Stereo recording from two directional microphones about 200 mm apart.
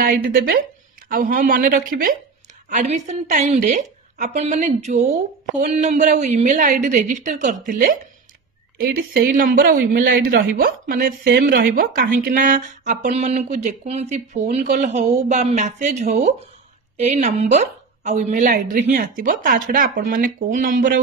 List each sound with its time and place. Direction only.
0.0 s a woman's voice: 50° right (ahead or behind)